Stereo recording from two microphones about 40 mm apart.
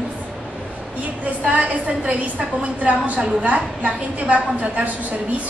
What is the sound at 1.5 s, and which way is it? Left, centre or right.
A woman's voice, right.